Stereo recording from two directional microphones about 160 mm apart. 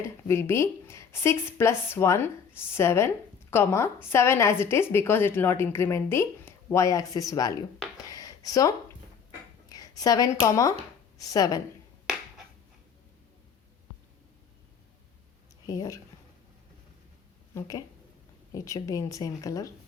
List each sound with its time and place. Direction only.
0.0 s a woman's voice: 15° left (ahead or behind)
7.9 s a sound: 20° left (ahead or behind)
9.6 s speech: 20° left (ahead or behind)
15.6 s speech: 20° left (ahead or behind)
17.5 s speech: 20° left (ahead or behind)